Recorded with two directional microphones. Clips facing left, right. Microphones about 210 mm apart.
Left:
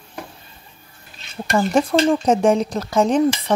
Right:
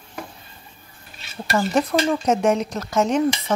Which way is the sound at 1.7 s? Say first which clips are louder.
Left 4 dB; 30° left (ahead or behind).